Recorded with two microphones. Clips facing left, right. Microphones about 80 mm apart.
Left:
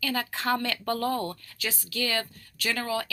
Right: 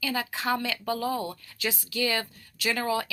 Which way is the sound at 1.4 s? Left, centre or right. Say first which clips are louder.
Right 3 dB; right.